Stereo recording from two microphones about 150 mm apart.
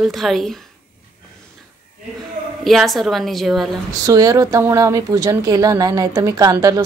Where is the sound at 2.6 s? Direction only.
Centre (ahead or behind).